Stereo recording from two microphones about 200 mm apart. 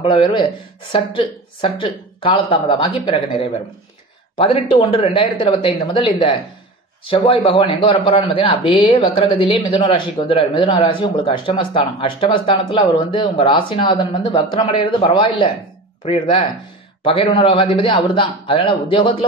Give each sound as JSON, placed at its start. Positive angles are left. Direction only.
{"t": 0.0, "sound": "a man's voice", "side_deg": 25}